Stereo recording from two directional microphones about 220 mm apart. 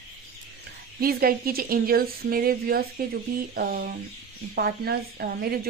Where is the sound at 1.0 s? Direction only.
40° right (ahead or behind).